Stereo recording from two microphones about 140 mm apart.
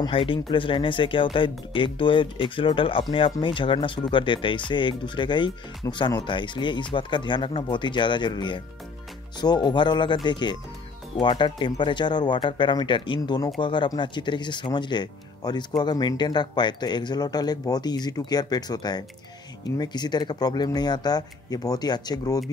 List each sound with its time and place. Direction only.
0.0 s speech: 35° left (ahead or behind)